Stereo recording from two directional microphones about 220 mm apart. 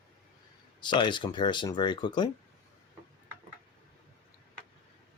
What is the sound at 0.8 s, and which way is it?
Speech, 20° left (ahead or behind).